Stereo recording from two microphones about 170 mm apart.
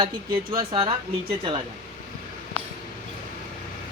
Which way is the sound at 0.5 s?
30° right (ahead or behind).